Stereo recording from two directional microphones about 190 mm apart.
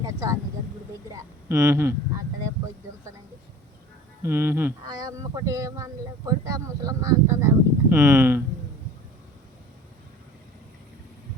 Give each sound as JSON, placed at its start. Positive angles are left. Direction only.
{"t": 0.0, "sound": "a sound", "side_deg": -15}
{"t": 1.1, "sound": "speech", "side_deg": -15}
{"t": 4.2, "sound": "speech", "side_deg": -10}